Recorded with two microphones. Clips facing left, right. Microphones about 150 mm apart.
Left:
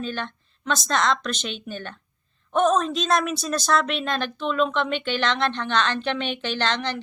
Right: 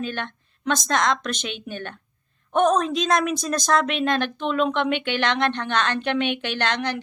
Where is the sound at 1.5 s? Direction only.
55° right (ahead or behind).